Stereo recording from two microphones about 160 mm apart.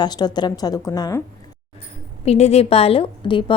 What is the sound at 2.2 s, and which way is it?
A woman's voice, 40° left (ahead or behind).